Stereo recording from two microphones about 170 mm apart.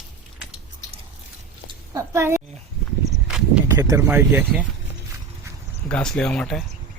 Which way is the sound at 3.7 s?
20° right (ahead or behind).